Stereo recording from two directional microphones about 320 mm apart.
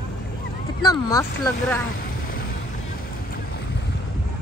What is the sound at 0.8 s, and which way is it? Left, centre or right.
Speech, centre.